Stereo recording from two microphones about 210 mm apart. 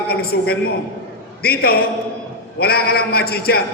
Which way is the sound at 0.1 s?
45° left (ahead or behind).